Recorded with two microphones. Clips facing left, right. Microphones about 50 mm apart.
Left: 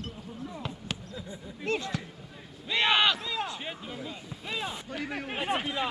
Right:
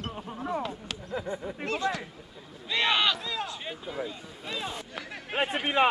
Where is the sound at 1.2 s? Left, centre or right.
Right.